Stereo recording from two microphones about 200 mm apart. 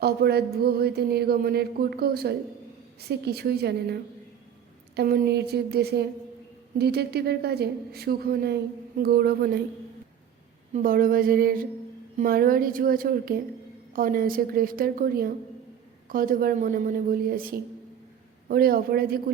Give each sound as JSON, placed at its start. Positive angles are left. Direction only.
{"t": 0.0, "sound": "speech", "side_deg": -55}
{"t": 10.8, "sound": "speech", "side_deg": -45}